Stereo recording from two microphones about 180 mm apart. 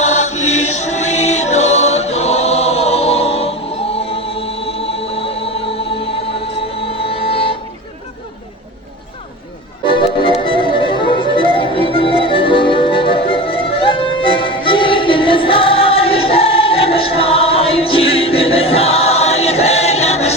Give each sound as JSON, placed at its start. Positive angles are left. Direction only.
{"t": 0.0, "sound": "choir", "side_deg": 40}
{"t": 7.1, "sound": "music", "side_deg": 30}
{"t": 9.8, "sound": "music", "side_deg": 30}